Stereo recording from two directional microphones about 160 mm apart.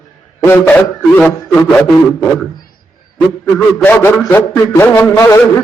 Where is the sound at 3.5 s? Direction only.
10° left (ahead or behind).